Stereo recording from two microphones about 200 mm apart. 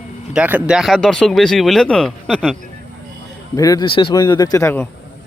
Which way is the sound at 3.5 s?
15° left (ahead or behind).